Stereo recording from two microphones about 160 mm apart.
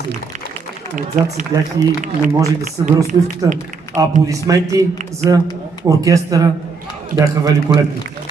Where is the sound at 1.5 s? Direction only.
30° right (ahead or behind).